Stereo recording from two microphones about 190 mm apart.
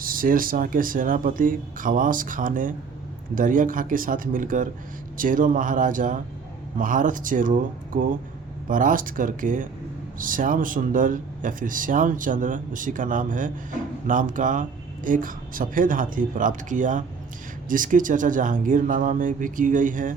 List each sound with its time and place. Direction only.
0.0 s speech: 50° right (ahead or behind)